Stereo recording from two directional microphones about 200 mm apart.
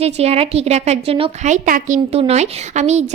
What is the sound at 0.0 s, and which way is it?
A woman's voice, 30° right (ahead or behind).